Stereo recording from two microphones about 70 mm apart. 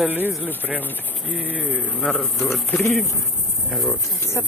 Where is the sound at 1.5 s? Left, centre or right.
Left.